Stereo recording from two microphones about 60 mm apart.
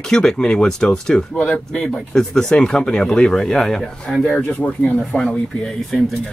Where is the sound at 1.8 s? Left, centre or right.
Centre.